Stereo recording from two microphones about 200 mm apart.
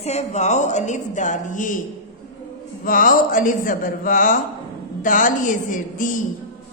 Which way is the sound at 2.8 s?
45° left (ahead or behind).